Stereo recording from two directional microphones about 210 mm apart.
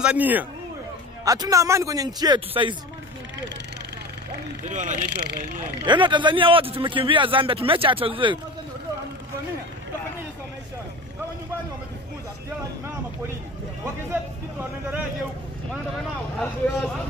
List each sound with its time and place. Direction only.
0.0 s a man's voice: 5° right (ahead or behind); by 2.7 s 20° right (ahead or behind)
4.6 s speech: 35° right (ahead or behind)
5.1 s speech: 50° right (ahead or behind)
5.9 s a man's voice: 20° right (ahead or behind)
14.1 s a man's voice: 10° right (ahead or behind)
16.3 s speech: 5° left (ahead or behind)